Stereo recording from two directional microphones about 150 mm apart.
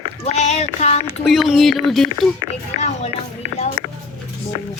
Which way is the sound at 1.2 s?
Centre (ahead or behind).